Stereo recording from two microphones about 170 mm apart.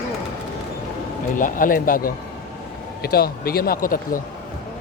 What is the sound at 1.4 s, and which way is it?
Speech, 55° left (ahead or behind).